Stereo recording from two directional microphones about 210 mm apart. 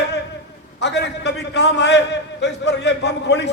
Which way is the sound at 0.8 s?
55° left (ahead or behind).